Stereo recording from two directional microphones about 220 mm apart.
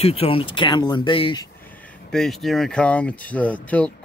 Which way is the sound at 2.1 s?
Centre (ahead or behind).